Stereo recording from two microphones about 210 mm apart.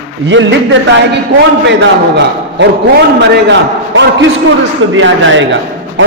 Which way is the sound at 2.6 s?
60° right (ahead or behind).